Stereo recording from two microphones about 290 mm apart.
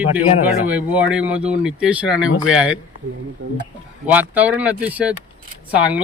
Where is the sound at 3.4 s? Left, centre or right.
Right.